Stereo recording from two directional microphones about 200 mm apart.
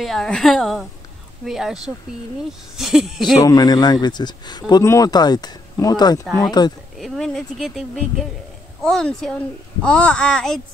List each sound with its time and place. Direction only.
0.0 s a child's voice: centre (ahead or behind)
2.8 s a child's voice: centre (ahead or behind)
3.3 s speech: 20° left (ahead or behind)
7.0 s a child's voice: centre (ahead or behind)